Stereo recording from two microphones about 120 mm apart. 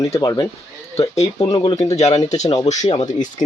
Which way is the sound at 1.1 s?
65° left (ahead or behind).